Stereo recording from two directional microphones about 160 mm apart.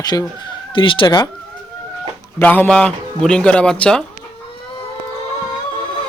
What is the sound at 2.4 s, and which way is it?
A man's voice, 10° left (ahead or behind).